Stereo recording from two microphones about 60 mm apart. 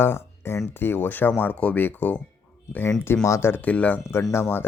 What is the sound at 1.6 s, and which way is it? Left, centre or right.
Speech, left.